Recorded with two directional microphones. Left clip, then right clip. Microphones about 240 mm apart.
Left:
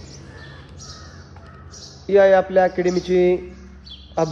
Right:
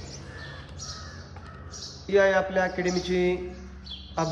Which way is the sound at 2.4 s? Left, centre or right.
Centre.